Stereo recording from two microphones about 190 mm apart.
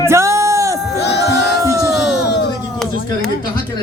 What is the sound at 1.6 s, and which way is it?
Speech, 15° right (ahead or behind).